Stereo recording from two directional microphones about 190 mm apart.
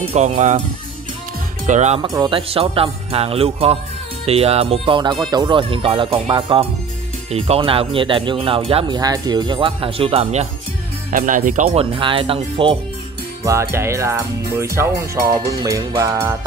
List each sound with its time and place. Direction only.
0.1 s speech: 35° right (ahead or behind)
1.7 s speech: 35° right (ahead or behind)
2.0 s speech: 25° right (ahead or behind)
11.1 s speech: 45° right (ahead or behind); by 12.7 s 30° right (ahead or behind)
13.4 s speech: 15° right (ahead or behind)